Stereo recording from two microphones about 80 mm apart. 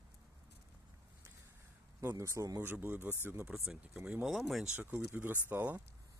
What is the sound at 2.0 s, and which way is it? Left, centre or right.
Speech, right.